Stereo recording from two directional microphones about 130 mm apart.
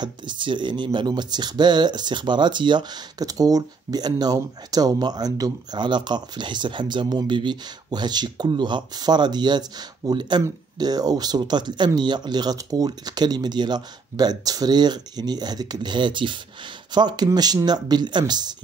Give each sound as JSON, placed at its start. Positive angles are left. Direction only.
{"t": 0.0, "sound": "speech", "side_deg": -35}